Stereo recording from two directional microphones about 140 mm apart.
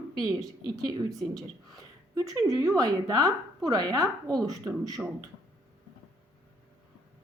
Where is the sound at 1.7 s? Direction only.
25° right (ahead or behind).